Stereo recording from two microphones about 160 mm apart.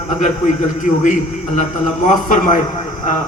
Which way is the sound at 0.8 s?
50° left (ahead or behind).